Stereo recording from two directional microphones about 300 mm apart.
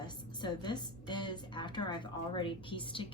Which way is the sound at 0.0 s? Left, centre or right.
Centre.